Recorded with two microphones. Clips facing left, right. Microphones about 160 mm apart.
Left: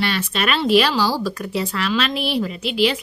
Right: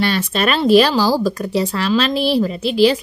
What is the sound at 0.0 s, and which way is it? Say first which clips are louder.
Speech: right 4 dB; 40° right (ahead or behind).